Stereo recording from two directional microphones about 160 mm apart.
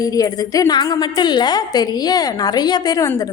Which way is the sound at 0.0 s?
20° left (ahead or behind).